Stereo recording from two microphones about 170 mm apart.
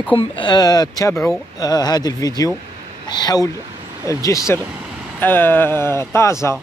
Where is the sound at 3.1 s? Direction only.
25° left (ahead or behind).